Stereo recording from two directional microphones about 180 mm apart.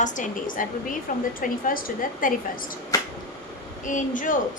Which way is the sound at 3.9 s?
45° left (ahead or behind).